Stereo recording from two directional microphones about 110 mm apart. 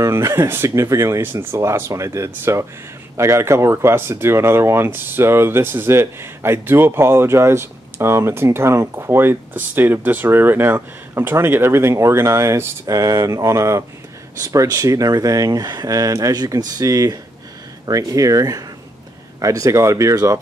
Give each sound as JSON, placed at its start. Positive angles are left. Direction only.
{"t": 0.0, "sound": "speech", "side_deg": -25}